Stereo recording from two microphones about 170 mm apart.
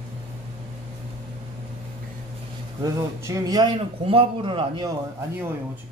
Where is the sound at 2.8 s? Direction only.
20° right (ahead or behind).